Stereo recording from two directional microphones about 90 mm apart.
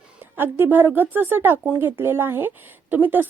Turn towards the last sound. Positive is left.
turn(degrees=-20)  # may be behind; listen again after turning